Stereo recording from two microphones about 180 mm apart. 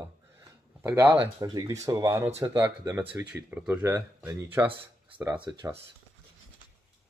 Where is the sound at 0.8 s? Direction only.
15° right (ahead or behind).